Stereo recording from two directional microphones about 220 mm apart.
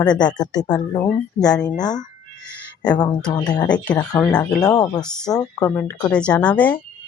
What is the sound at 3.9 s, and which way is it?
Speech, 15° left (ahead or behind).